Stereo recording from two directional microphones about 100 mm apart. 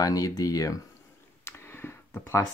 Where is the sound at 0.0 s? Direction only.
40° left (ahead or behind).